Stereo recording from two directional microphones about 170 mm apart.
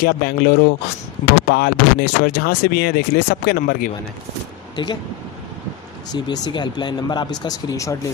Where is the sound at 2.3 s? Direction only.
70° left (ahead or behind).